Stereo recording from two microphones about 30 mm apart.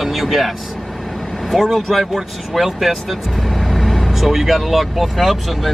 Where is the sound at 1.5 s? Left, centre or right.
Centre.